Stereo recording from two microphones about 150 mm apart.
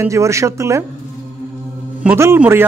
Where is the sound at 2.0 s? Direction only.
15° right (ahead or behind).